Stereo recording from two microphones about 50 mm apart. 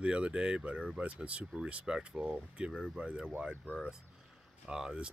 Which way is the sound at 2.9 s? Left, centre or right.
Centre.